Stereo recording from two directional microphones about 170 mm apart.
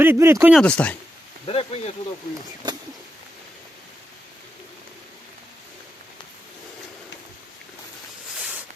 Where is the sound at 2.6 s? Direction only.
25° right (ahead or behind).